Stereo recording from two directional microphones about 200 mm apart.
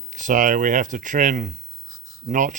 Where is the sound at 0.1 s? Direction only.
40° right (ahead or behind).